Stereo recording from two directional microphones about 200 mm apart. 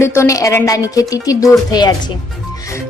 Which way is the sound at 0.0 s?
15° left (ahead or behind).